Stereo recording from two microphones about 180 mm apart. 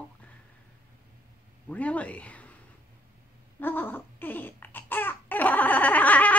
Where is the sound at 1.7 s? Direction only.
10° left (ahead or behind).